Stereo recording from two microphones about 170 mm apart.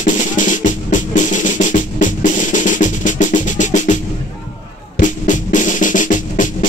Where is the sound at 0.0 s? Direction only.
50° left (ahead or behind).